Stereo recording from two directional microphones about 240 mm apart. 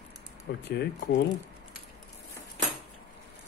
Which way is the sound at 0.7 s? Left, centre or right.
Left.